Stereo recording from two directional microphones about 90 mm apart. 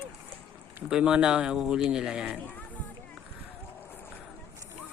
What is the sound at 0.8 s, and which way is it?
Speech, 10° right (ahead or behind).